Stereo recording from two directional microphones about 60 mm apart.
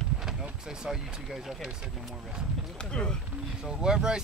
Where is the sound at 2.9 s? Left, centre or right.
Centre.